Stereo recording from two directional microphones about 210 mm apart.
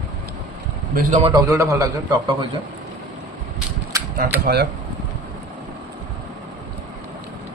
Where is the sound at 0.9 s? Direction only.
30° right (ahead or behind).